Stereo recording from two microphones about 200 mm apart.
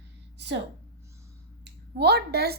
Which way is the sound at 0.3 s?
60° right (ahead or behind).